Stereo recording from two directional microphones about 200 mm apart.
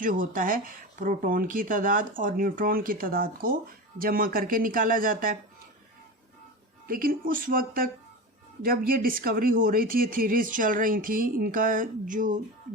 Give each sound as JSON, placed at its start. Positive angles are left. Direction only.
{"t": 0.0, "sound": "speech", "side_deg": -40}
{"t": 6.8, "sound": "speech", "side_deg": -45}